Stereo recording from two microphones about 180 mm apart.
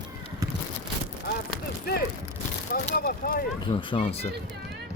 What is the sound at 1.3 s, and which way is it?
Speech, 60° left (ahead or behind).